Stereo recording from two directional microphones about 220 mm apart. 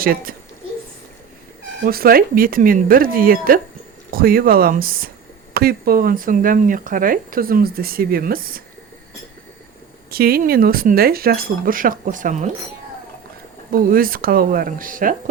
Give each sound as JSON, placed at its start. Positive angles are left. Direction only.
{"t": 0.0, "sound": "speech", "side_deg": -40}
{"t": 1.8, "sound": "speech", "side_deg": -45}
{"t": 10.1, "sound": "speech", "side_deg": -45}
{"t": 13.7, "sound": "speech", "side_deg": -40}